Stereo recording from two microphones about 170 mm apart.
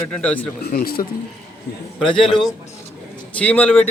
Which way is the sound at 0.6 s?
60° left (ahead or behind).